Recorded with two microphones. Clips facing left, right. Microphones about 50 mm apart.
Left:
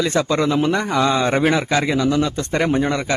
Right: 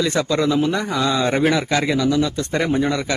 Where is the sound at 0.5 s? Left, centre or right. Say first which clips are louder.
Left 1 dB; left.